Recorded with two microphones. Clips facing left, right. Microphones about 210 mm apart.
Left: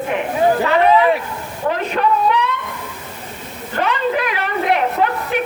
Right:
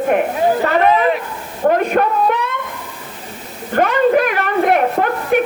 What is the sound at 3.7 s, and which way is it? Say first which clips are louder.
A woman's voice: right 6 dB; 50° right (ahead or behind).